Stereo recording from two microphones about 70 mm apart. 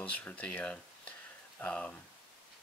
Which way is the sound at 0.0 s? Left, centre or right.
Left.